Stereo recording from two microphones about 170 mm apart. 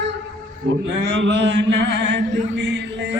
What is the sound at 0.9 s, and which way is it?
Mantra, 90° right.